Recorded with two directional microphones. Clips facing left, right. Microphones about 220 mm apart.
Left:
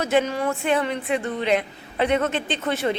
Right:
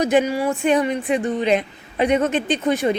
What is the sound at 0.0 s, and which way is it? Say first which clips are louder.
A woman's voice: right 4 dB; 15° right (ahead or behind).